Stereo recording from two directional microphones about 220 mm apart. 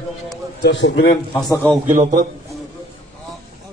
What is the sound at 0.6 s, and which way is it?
Speech, 55° left (ahead or behind).